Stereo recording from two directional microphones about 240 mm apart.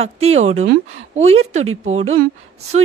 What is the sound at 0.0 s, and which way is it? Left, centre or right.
Speech, right.